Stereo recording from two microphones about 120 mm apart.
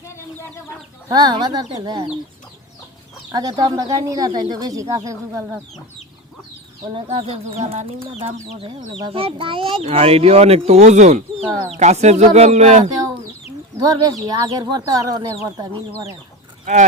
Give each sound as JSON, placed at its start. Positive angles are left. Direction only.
{"t": 1.0, "sound": "speech", "side_deg": -35}
{"t": 3.3, "sound": "speech", "side_deg": -35}
{"t": 6.8, "sound": "speech", "side_deg": -50}
{"t": 8.5, "sound": "speech", "side_deg": -50}
{"t": 13.7, "sound": "speech", "side_deg": -30}